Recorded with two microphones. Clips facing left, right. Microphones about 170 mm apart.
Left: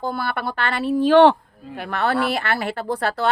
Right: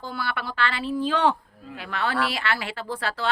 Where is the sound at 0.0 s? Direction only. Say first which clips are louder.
Left 6 dB; 50° left (ahead or behind).